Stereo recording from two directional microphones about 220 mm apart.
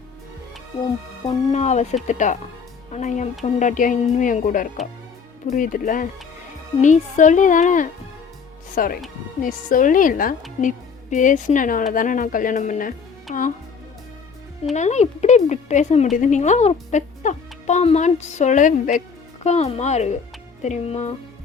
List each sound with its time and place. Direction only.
1.5 s speech: 30° left (ahead or behind)
14.6 s speech: 30° left (ahead or behind)